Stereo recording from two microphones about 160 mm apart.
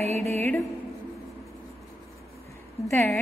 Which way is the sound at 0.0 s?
40° right (ahead or behind).